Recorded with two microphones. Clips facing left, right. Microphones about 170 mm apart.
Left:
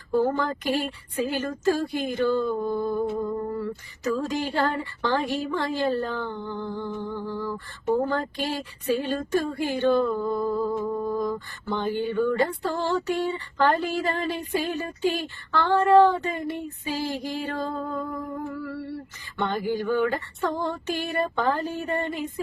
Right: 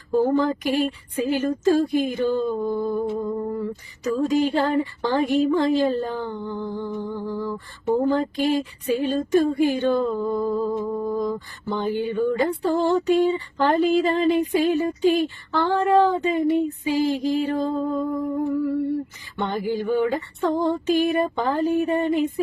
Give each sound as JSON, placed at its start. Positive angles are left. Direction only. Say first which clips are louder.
{"t": 0.1, "sound": "a sound", "louder": "right 4 dB", "side_deg": -20}
{"t": 2.0, "sound": "speech", "louder": "right 2 dB", "side_deg": -15}
{"t": 11.0, "sound": "mantra", "louder": "right 2 dB", "side_deg": -15}
{"t": 11.7, "sound": "speech", "louder": "right 2 dB", "side_deg": -10}